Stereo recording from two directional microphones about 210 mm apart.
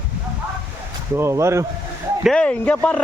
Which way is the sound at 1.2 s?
15° right (ahead or behind).